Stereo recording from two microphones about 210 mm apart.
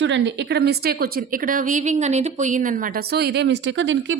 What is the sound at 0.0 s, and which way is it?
A woman's voice, 60° right (ahead or behind).